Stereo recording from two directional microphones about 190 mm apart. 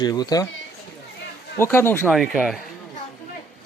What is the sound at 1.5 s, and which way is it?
Speech, 15° left (ahead or behind).